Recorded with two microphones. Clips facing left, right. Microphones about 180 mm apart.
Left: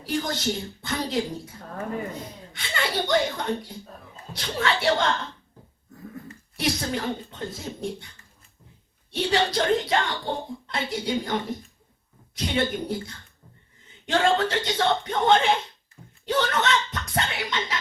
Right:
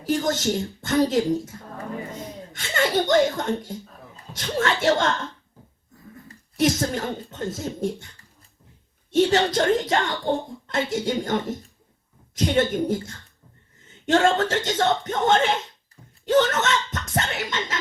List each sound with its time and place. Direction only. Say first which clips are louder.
0.0 s speech: right 4 dB; 45° right (ahead or behind)
1.5 s a sound: right 1 dB; 45° right (ahead or behind)
2.5 s speech: right 6 dB; 45° right (ahead or behind)
6.2 s speech: right 7 dB; 45° right (ahead or behind)
9.1 s speech: right 5 dB; 45° right (ahead or behind)
16.2 s a sound: right 5 dB; 45° right (ahead or behind)